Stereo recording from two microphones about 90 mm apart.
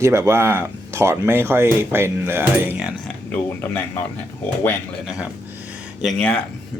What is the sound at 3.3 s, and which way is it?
Speech, 20° left (ahead or behind).